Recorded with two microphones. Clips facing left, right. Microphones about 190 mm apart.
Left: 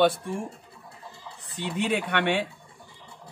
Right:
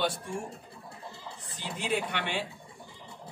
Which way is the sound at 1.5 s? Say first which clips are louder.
Left 5 dB; 65° left (ahead or behind).